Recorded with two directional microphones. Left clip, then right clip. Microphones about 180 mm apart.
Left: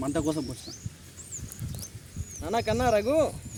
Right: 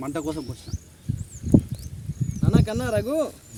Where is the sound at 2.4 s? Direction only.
90° right.